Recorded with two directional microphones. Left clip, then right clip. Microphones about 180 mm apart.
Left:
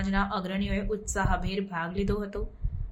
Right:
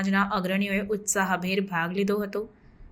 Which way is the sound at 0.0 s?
20° right (ahead or behind).